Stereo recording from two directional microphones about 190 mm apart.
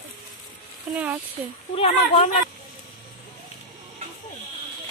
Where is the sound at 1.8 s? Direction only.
30° left (ahead or behind).